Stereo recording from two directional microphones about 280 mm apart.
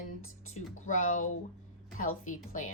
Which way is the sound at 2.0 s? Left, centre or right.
Left.